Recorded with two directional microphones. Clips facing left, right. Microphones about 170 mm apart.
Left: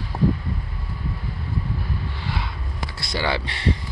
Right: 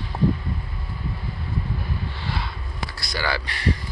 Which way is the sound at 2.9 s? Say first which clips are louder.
Left 3 dB; 25° left (ahead or behind).